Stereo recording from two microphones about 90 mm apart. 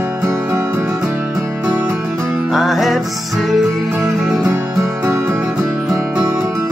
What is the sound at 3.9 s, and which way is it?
Music, 15° right (ahead or behind).